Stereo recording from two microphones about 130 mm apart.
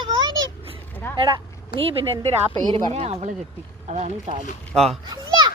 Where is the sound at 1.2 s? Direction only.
35° right (ahead or behind).